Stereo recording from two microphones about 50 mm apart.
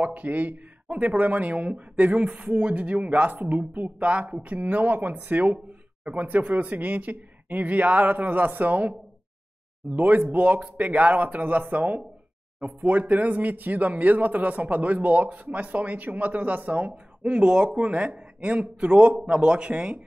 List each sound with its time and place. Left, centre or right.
0.0 s speech: right